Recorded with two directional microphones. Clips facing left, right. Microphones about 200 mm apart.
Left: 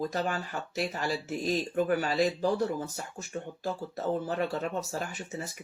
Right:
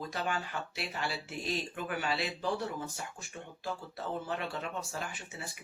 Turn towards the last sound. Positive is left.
turn(degrees=40)  # may be behind; listen again after turning